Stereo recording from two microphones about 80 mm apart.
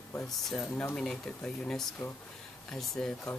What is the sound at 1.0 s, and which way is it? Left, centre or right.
Speech, centre.